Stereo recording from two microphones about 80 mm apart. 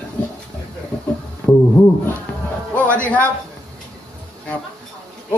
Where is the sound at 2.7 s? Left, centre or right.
Centre.